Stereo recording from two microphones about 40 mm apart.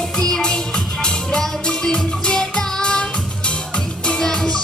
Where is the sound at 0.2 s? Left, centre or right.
Centre.